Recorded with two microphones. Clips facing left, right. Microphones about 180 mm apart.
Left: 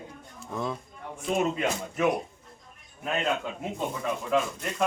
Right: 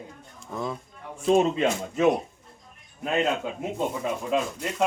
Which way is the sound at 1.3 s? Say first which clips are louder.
Right 5 dB; 25° right (ahead or behind).